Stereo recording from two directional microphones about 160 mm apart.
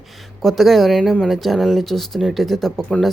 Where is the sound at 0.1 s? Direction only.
Centre (ahead or behind).